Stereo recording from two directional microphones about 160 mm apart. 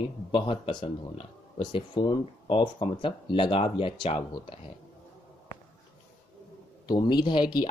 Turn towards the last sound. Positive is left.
turn(degrees=25)  # may be behind; listen again after turning